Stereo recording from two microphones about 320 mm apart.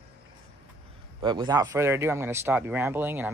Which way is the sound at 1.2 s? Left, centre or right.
Centre.